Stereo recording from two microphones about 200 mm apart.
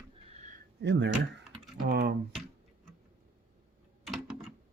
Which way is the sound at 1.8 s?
55° right (ahead or behind).